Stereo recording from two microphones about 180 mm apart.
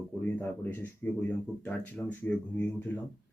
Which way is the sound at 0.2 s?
10° left (ahead or behind).